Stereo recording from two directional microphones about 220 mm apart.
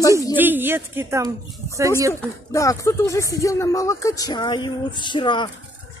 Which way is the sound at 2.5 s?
15° left (ahead or behind).